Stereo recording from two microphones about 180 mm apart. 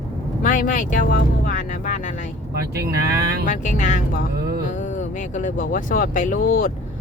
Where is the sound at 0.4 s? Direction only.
45° left (ahead or behind).